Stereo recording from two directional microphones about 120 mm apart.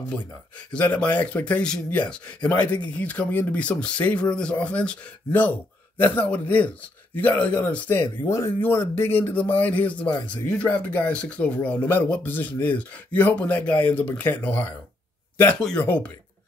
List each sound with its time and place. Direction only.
0.7 s speech: 10° left (ahead or behind)
15.8 s speech: 15° left (ahead or behind)